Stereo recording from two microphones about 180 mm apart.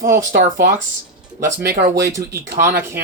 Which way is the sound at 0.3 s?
55° right (ahead or behind).